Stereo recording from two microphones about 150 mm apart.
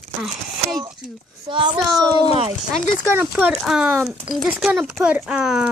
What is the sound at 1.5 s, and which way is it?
Speech, 35° right (ahead or behind).